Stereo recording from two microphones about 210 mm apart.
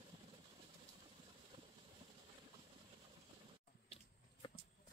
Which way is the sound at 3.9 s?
25° left (ahead or behind).